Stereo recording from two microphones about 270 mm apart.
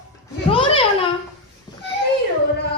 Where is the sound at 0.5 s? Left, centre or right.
Centre.